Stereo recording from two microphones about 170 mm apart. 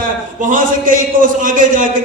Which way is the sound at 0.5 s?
50° right (ahead or behind).